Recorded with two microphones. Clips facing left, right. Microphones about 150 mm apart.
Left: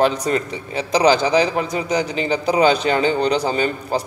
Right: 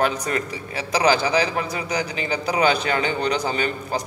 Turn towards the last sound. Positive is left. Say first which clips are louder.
# left 4 dB
turn(degrees=35)  # may be behind; listen again after turning